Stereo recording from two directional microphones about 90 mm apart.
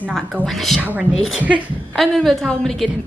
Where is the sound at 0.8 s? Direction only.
15° right (ahead or behind).